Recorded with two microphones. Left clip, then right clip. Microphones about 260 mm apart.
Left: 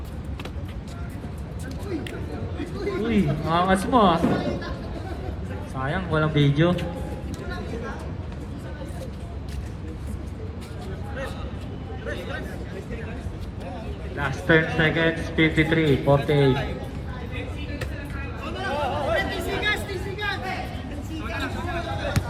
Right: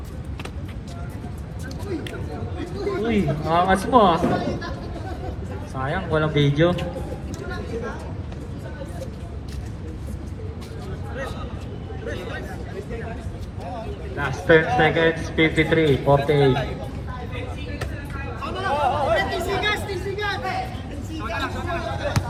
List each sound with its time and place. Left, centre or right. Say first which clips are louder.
2.6 s speech: right 2 dB; centre
5.7 s speech: right 2 dB; centre
14.2 s speech: right 3 dB; centre
18.4 s chatter: right 5 dB; centre
21.3 s a sound: right 3 dB; centre